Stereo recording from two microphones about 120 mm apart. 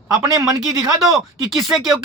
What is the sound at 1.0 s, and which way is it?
Speech, centre (ahead or behind).